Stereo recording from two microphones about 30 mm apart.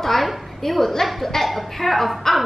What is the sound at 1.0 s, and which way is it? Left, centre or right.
Speech, centre.